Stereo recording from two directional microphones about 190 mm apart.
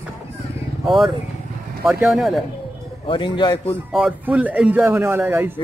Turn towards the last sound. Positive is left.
turn(degrees=-10)  # may be behind; listen again after turning